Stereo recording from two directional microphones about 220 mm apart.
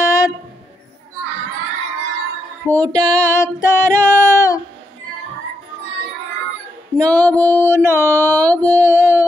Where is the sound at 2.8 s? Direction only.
20° right (ahead or behind).